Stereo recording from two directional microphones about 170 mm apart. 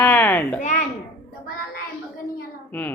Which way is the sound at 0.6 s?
45° left (ahead or behind).